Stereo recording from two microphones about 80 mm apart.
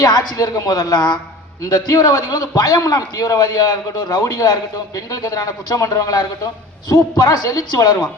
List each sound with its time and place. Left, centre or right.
0.0 s a man's voice: left
7.3 s a man's voice: left